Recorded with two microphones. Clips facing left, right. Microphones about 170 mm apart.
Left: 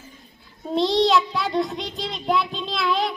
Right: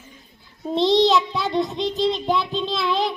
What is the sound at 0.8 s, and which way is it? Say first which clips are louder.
Child singing: right 2 dB; centre (ahead or behind).